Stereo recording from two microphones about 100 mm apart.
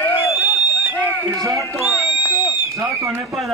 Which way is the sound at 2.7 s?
30° right (ahead or behind).